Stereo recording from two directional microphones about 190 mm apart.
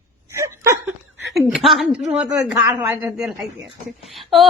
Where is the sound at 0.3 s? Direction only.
15° right (ahead or behind).